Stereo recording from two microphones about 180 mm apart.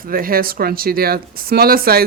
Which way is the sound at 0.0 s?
55° right (ahead or behind).